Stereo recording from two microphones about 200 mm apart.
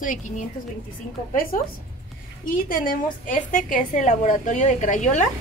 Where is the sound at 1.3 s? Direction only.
45° left (ahead or behind).